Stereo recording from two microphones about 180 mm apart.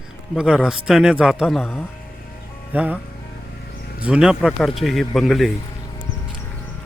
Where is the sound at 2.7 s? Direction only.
10° right (ahead or behind).